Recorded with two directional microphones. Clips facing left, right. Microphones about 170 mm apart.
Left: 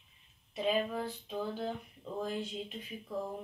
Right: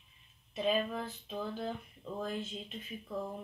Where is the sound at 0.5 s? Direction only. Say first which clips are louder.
Even; 10° left (ahead or behind).